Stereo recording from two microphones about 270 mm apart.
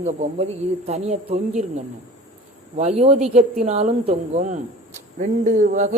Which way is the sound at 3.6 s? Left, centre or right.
Right.